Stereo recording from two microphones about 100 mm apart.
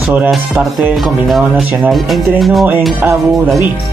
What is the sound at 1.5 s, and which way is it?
Speech, 20° right (ahead or behind).